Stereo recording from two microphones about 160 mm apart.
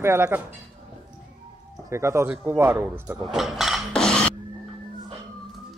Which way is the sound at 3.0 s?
5° right (ahead or behind).